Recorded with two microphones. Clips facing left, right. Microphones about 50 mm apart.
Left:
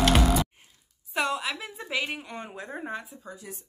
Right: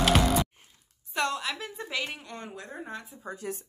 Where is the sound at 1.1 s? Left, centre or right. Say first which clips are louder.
Left 1 dB; centre.